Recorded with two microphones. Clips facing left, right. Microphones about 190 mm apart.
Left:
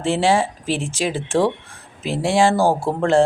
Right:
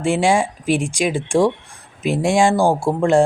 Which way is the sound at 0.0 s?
10° right (ahead or behind).